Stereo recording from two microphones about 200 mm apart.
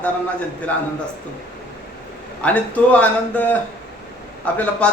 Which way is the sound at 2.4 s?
5° left (ahead or behind).